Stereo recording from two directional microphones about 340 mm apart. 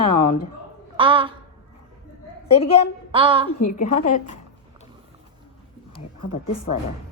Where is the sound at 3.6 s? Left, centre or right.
Left.